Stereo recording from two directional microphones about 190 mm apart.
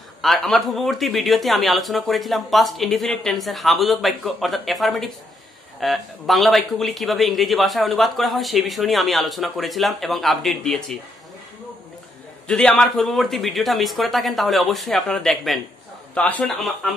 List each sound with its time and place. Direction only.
0.2 s a man's voice: centre (ahead or behind)
12.4 s a man's voice: 5° left (ahead or behind)